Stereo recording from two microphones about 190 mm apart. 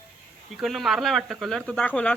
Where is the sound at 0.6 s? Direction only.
Centre (ahead or behind).